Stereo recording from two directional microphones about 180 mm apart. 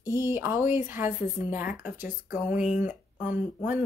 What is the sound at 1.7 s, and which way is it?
Speech, 45° left (ahead or behind).